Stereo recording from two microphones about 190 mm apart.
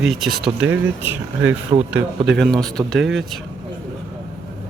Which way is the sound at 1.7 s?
25° right (ahead or behind).